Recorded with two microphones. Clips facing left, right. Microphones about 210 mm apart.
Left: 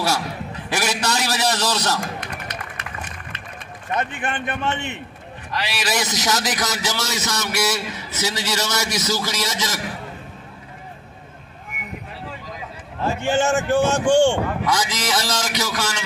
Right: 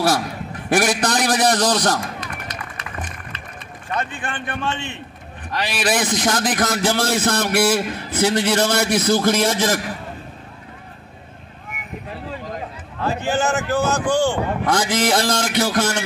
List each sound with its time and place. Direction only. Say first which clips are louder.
0.7 s a man's voice: right 6 dB; 50° right (ahead or behind)
2.1 s music: even; 55° left (ahead or behind)
3.9 s a man's voice: left 1 dB; 20° left (ahead or behind)
5.5 s a man's voice: right 4 dB; 50° right (ahead or behind)
13.0 s a man's voice: left 1 dB; 25° left (ahead or behind)
14.6 s a man's voice: right 4 dB; 50° right (ahead or behind)